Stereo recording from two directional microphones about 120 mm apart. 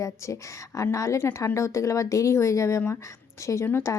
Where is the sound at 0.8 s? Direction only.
25° left (ahead or behind).